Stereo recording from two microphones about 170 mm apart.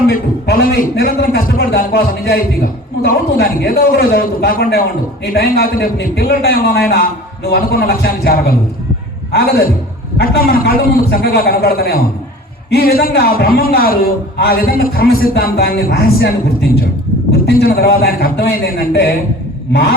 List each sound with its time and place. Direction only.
0.1 s a man's voice: 65° left (ahead or behind)
10.2 s a man's voice: 60° left (ahead or behind)
17.4 s a man's voice: 65° left (ahead or behind)